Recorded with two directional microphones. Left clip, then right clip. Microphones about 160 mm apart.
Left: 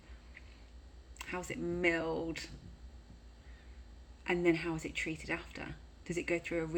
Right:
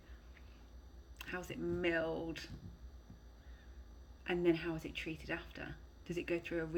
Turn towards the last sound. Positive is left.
turn(degrees=20)  # may be behind; listen again after turning